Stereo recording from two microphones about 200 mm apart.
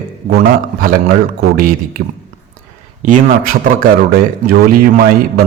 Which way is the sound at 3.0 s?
40° right (ahead or behind).